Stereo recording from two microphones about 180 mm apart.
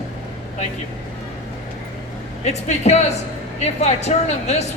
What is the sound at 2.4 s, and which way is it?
A woman's voice, 40° left (ahead or behind).